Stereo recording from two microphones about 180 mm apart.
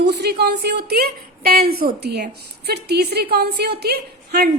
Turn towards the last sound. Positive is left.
turn(degrees=-60)  # may be behind; listen again after turning